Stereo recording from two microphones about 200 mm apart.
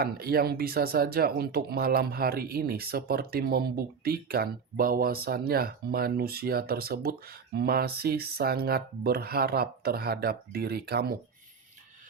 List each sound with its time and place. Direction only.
0.0 s speech: 50° right (ahead or behind)